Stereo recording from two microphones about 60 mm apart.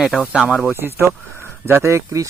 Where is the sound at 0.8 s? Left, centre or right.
Right.